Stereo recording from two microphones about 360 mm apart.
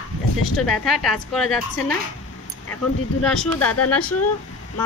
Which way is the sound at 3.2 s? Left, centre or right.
Centre.